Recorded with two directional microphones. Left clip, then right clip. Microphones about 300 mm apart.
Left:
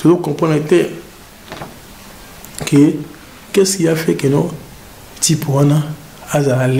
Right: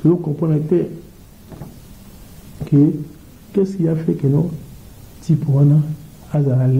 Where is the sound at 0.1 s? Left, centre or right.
Left.